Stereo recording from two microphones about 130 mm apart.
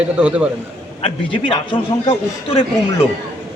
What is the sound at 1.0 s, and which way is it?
A man's voice, 40° left (ahead or behind).